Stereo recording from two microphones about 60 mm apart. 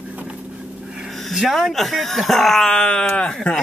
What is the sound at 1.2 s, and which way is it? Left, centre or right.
Speech, centre.